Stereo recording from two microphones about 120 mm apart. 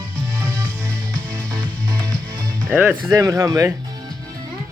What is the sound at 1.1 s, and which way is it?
Music, 10° left (ahead or behind).